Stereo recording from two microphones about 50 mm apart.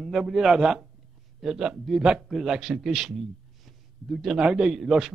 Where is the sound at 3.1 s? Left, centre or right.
Centre.